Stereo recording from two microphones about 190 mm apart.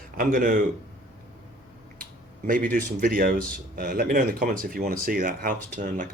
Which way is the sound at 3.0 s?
50° right (ahead or behind).